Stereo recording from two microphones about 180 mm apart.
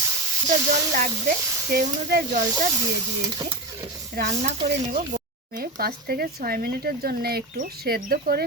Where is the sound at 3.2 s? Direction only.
25° right (ahead or behind).